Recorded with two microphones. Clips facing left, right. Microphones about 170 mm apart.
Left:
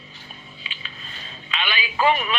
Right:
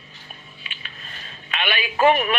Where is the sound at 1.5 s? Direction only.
50° right (ahead or behind).